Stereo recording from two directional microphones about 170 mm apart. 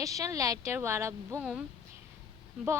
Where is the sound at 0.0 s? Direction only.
20° right (ahead or behind).